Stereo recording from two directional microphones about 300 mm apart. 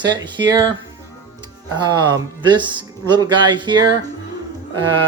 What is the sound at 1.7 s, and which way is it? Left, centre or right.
Speech, centre.